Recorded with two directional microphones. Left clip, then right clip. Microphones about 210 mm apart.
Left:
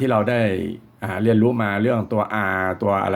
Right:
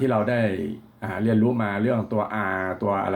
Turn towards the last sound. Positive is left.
turn(degrees=35)  # may be behind; listen again after turning